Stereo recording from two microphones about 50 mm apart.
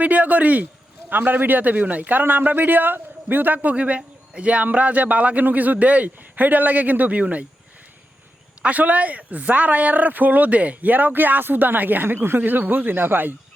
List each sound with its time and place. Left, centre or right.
0.0 s a man's voice: right
8.6 s a man's voice: right
12.4 s a man's voice: right